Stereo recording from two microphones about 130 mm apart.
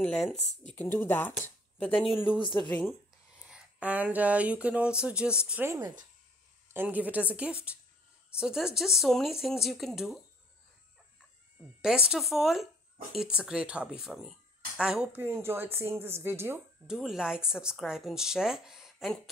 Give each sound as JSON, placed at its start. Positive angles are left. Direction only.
{"t": 0.0, "sound": "speech", "side_deg": 5}
{"t": 0.7, "sound": "speech", "side_deg": 15}
{"t": 2.0, "sound": "speech", "side_deg": 40}
{"t": 2.7, "sound": "speech", "side_deg": 0}
{"t": 5.7, "sound": "speech", "side_deg": -25}
{"t": 11.8, "sound": "speech", "side_deg": -5}
{"t": 15.2, "sound": "speech", "side_deg": -20}
{"t": 16.8, "sound": "speech", "side_deg": -5}